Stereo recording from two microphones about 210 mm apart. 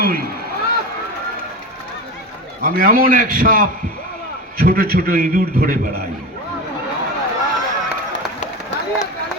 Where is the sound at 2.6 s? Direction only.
40° right (ahead or behind).